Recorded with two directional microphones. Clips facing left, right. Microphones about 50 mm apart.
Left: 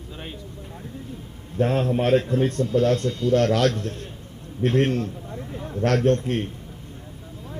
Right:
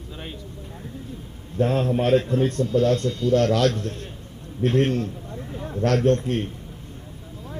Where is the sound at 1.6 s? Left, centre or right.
Left.